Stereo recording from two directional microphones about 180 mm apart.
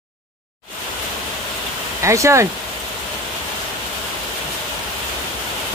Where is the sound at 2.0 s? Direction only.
15° right (ahead or behind).